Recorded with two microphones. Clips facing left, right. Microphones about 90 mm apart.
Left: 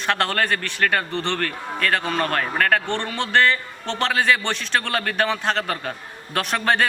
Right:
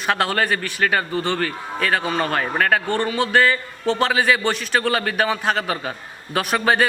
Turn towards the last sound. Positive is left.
turn(degrees=-5)  # may be behind; listen again after turning